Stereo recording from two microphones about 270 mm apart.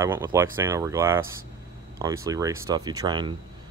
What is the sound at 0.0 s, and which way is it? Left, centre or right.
Speech, centre.